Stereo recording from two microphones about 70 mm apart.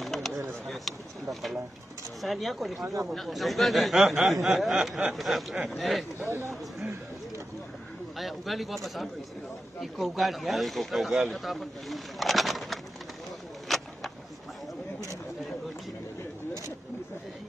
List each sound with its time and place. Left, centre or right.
0.0 s a sound: centre
2.2 s speech: centre
2.8 s speech: right
3.2 s speech: centre
6.2 s speech: right
8.2 s speech: centre
13.7 s vehicle: centre